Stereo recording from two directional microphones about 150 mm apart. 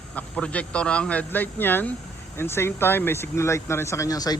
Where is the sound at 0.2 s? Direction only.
10° left (ahead or behind).